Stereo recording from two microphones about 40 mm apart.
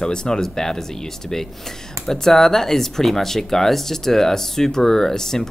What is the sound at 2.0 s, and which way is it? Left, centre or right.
Speech, centre.